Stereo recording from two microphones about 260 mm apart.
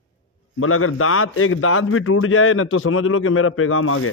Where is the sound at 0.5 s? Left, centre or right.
Left.